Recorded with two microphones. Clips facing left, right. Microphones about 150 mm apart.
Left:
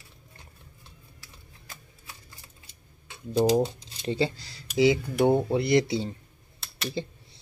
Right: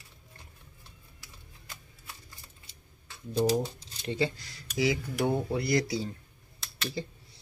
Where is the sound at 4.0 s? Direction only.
30° left (ahead or behind).